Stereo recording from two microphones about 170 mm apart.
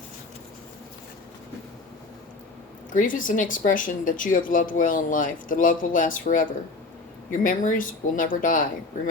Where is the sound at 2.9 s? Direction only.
50° left (ahead or behind).